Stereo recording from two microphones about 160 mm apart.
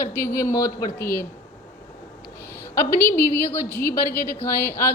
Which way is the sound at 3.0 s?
15° left (ahead or behind).